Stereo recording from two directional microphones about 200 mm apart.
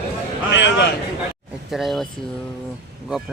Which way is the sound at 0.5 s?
65° left (ahead or behind).